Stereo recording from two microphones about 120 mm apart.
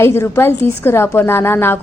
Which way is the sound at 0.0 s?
20° left (ahead or behind).